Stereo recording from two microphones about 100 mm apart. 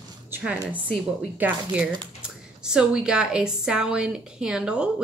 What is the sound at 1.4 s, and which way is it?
Speech, 15° right (ahead or behind).